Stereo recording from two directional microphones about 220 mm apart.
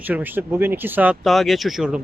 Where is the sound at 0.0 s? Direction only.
10° right (ahead or behind).